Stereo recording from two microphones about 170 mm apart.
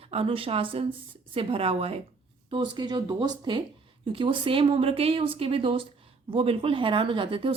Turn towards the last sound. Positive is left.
turn(degrees=-30)  # may be behind; listen again after turning